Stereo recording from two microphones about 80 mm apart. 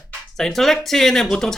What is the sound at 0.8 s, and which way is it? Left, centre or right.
Speech, centre.